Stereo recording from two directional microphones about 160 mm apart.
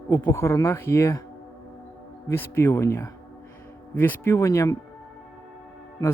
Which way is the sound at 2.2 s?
15° left (ahead or behind).